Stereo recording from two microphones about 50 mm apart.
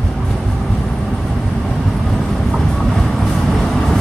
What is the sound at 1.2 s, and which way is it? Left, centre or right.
Vehicle, centre.